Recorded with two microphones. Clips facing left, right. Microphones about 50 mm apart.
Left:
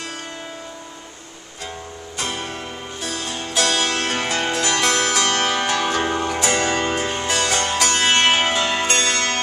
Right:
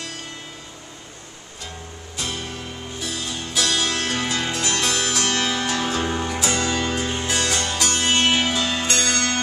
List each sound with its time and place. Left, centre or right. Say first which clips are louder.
2.1 s music: left 3 dB; left